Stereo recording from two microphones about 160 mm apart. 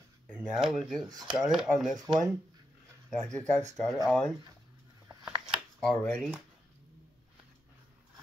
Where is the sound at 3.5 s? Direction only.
45° right (ahead or behind).